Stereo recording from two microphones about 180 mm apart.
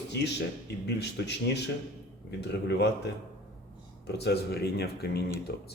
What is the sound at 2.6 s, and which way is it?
Speech, 70° left (ahead or behind).